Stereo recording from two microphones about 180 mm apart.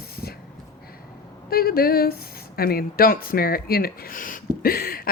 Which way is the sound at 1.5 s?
55° left (ahead or behind).